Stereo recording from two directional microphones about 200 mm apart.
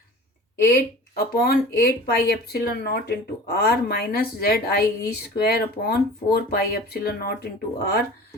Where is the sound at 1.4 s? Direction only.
50° left (ahead or behind).